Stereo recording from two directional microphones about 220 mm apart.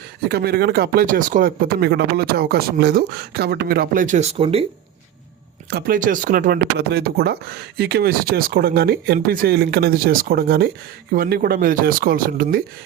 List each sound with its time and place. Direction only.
0.3 s speech: 45° right (ahead or behind); by 4.6 s 25° right (ahead or behind)
5.7 s speech: 40° right (ahead or behind)